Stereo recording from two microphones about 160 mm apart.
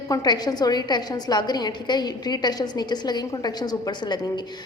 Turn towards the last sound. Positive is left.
turn(degrees=25)  # may be behind; listen again after turning